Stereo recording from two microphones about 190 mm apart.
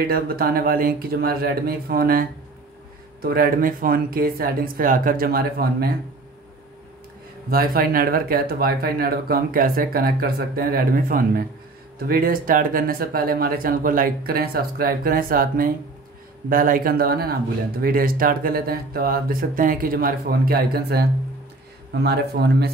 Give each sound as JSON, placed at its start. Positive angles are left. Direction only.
{"t": 0.0, "sound": "speech", "side_deg": -55}
{"t": 7.4, "sound": "speech", "side_deg": -50}